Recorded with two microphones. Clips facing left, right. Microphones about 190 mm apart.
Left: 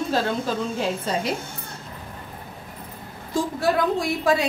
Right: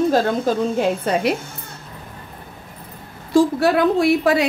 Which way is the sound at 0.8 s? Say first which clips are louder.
Right 6 dB; 60° right (ahead or behind).